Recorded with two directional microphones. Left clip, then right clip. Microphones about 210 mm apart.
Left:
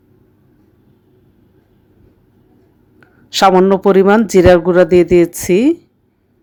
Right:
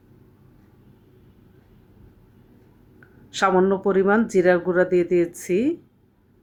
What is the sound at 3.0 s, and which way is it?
Speech, 40° left (ahead or behind).